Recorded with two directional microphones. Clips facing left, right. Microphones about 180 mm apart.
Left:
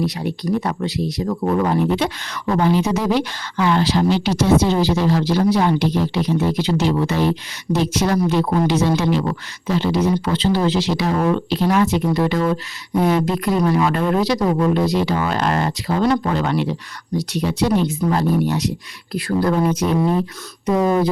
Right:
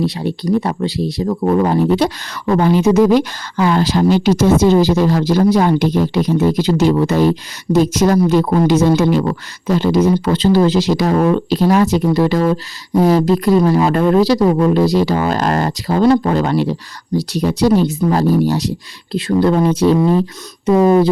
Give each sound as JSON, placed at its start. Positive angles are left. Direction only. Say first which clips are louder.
{"t": 0.0, "sound": "speech", "louder": "right 4 dB", "side_deg": -30}
{"t": 2.6, "sound": "speech", "louder": "right 7 dB", "side_deg": -50}
{"t": 20.0, "sound": "speech", "louder": "right 4 dB", "side_deg": 5}
{"t": 20.7, "sound": "speech", "louder": "right 6 dB", "side_deg": -25}